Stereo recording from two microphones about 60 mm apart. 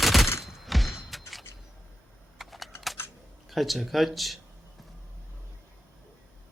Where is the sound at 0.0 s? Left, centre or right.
Centre.